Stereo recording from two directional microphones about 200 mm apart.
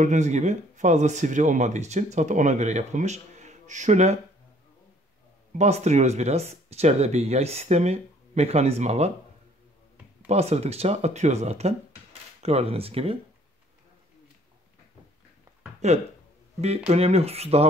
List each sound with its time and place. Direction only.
0.0 s speech: 35° right (ahead or behind)
5.5 s speech: 35° right (ahead or behind)
10.2 s speech: 35° right (ahead or behind)
15.8 s speech: 35° right (ahead or behind)